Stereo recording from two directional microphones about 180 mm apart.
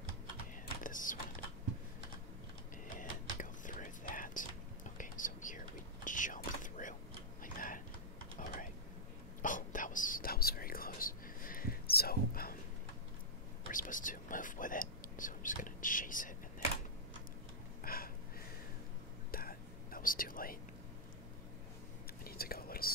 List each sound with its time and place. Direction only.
0.8 s typing: 45° left (ahead or behind)
3.0 s whispering: 50° left (ahead or behind)
7.4 s tick-tock: 50° left (ahead or behind)
8.4 s typing: 45° left (ahead or behind)
9.4 s whispering: 45° left (ahead or behind)
13.7 s whispering: 50° left (ahead or behind)
17.8 s a sound: 55° left (ahead or behind)
19.3 s whispering: 55° left (ahead or behind)
22.2 s whispering: 55° left (ahead or behind)